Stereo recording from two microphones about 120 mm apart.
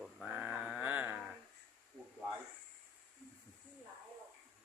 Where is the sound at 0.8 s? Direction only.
10° right (ahead or behind).